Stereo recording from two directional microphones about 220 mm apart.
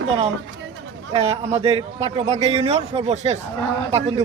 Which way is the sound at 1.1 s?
30° right (ahead or behind).